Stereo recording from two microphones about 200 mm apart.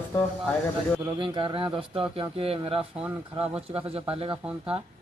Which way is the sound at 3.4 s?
30° right (ahead or behind).